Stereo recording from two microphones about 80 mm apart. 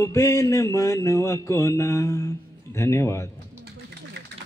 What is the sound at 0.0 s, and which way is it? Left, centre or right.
Mantra, left.